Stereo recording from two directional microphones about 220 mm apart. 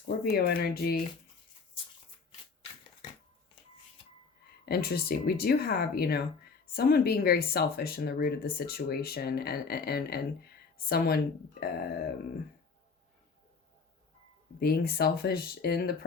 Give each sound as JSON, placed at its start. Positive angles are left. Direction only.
{"t": 0.1, "sound": "speech", "side_deg": 45}
{"t": 4.6, "sound": "speech", "side_deg": 45}
{"t": 14.6, "sound": "speech", "side_deg": 45}